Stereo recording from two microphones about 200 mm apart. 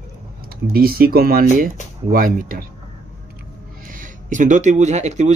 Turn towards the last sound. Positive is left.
turn(degrees=-35)  # may be behind; listen again after turning